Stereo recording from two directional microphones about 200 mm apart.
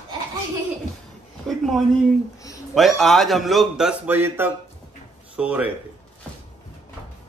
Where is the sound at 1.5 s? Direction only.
Centre (ahead or behind).